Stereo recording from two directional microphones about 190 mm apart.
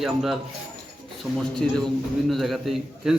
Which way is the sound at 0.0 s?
Centre (ahead or behind).